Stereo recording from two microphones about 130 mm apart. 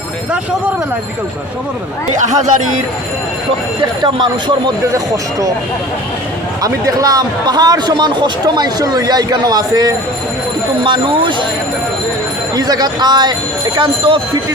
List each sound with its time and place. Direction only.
2.1 s speech: 70° right (ahead or behind)
3.8 s a man's voice: 35° right (ahead or behind)
6.6 s a man's voice: 30° right (ahead or behind)
12.5 s a man's voice: 30° right (ahead or behind)